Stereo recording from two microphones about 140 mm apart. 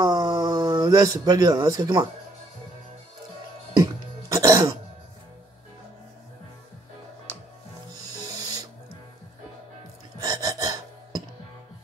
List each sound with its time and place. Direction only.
0.0 s a sound: 25° right (ahead or behind)
3.7 s throat clearing: 25° right (ahead or behind)
8.3 s music: 25° right (ahead or behind)
10.1 s music: 25° right (ahead or behind)